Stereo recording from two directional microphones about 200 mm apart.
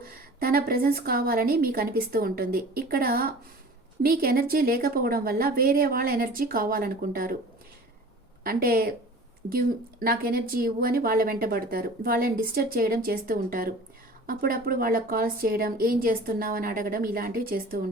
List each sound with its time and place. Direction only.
0.0 s speech: 45° right (ahead or behind)
8.4 s speech: 45° right (ahead or behind)